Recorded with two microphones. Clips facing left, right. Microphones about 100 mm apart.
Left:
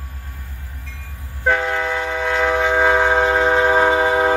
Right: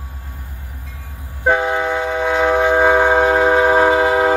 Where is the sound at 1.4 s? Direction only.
15° right (ahead or behind).